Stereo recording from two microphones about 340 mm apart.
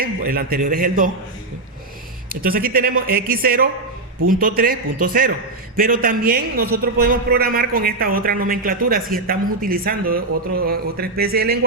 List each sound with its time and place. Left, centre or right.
0.0 s speech: right
2.3 s speech: right